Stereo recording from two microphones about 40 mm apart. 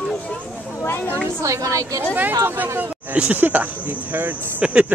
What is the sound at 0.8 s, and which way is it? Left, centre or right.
Speech, left.